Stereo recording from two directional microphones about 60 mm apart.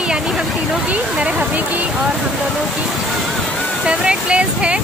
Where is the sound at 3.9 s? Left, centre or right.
Centre.